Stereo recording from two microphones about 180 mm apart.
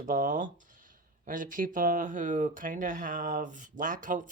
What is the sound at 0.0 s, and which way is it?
Speech, 50° right (ahead or behind).